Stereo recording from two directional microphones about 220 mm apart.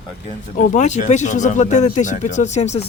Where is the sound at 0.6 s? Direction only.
35° left (ahead or behind).